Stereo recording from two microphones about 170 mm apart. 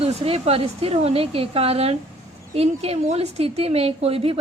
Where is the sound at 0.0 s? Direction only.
35° right (ahead or behind).